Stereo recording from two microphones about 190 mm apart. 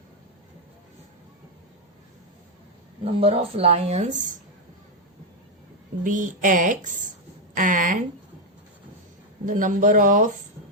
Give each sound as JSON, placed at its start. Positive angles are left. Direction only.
{"t": 3.0, "sound": "a woman's voice", "side_deg": -30}
{"t": 6.0, "sound": "speech", "side_deg": -40}
{"t": 9.5, "sound": "speech", "side_deg": -45}